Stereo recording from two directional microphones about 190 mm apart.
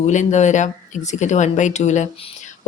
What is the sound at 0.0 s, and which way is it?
Speech, 40° left (ahead or behind).